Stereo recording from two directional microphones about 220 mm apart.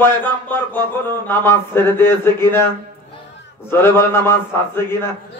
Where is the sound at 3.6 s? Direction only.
10° left (ahead or behind).